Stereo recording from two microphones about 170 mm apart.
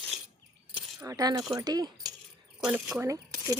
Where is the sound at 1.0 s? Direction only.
20° right (ahead or behind).